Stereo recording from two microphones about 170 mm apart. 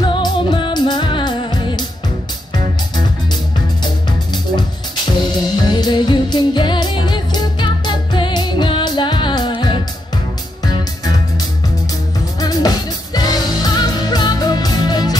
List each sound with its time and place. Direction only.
0.0 s music: 25° left (ahead or behind)
5.7 s music: 25° left (ahead or behind)
12.4 s music: 20° left (ahead or behind)